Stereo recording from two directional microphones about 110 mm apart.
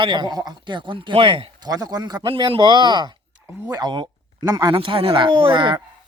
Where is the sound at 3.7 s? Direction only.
40° right (ahead or behind).